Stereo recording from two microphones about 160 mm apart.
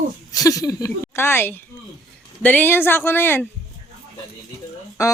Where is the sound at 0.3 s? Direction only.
20° left (ahead or behind).